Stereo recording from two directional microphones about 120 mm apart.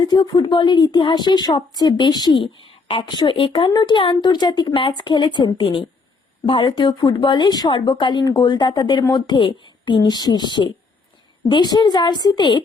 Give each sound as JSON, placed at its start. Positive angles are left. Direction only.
{"t": 0.0, "sound": "speech", "side_deg": 35}
{"t": 2.4, "sound": "speech", "side_deg": 50}
{"t": 3.7, "sound": "speech", "side_deg": 35}